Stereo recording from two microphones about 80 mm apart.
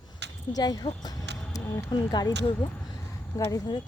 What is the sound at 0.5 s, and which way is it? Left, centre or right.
Speech, left.